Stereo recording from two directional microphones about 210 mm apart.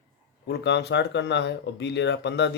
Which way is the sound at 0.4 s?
55° left (ahead or behind).